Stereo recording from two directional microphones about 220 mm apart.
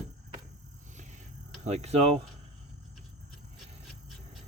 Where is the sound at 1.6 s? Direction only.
30° right (ahead or behind).